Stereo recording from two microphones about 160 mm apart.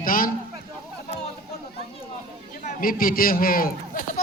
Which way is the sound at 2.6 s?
60° left (ahead or behind).